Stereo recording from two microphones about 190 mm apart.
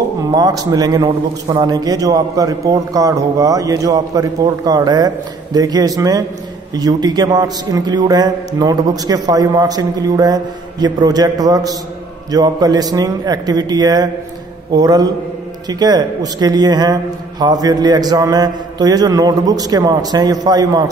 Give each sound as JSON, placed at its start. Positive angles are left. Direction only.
{"t": 0.3, "sound": "a man's voice", "side_deg": -20}